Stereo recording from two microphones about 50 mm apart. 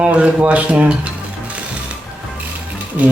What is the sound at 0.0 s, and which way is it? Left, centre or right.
Speech, right.